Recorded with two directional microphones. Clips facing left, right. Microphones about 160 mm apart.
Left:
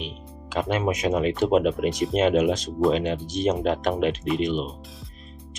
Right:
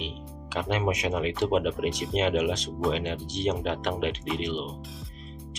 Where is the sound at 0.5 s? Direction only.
45° left (ahead or behind).